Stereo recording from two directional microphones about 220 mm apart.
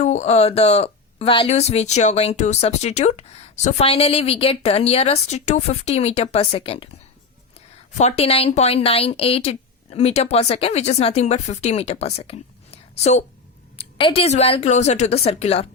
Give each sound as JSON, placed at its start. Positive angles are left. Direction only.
{"t": 0.0, "sound": "speech", "side_deg": 30}
{"t": 7.9, "sound": "speech", "side_deg": 30}